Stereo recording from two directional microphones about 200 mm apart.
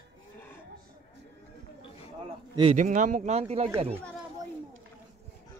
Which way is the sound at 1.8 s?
30° left (ahead or behind).